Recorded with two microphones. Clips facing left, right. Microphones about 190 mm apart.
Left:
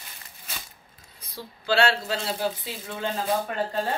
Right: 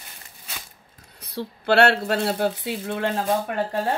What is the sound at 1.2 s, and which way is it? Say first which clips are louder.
Speech: right 5 dB; 65° right (ahead or behind).